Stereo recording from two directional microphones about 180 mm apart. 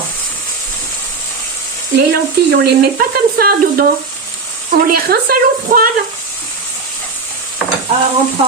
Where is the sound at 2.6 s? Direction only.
60° right (ahead or behind).